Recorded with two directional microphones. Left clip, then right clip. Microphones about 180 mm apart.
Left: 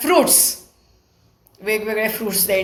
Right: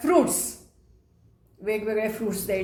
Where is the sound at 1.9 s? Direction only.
10° right (ahead or behind).